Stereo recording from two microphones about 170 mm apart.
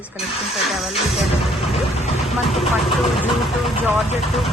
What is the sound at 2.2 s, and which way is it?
Speech, centre (ahead or behind).